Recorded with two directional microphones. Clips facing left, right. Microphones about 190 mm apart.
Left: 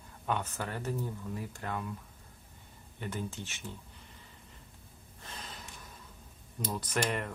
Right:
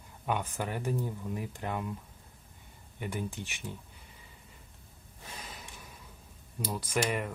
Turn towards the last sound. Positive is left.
turn(degrees=-10)  # may be behind; listen again after turning